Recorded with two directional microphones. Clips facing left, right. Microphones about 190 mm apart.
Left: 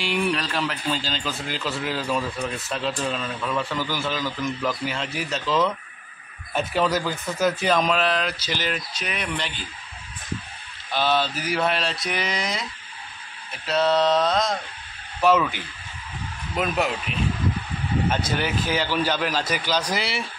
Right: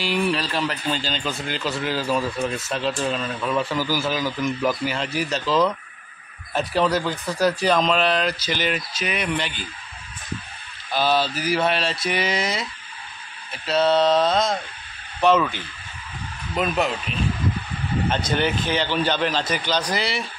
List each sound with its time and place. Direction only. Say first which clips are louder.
0.0 s speech: right 2 dB; centre (ahead or behind)
10.9 s speech: right 2 dB; centre (ahead or behind)
18.1 s speech: right 2 dB; 5° left (ahead or behind)